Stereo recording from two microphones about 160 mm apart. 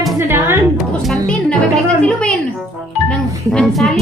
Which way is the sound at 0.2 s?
15° right (ahead or behind).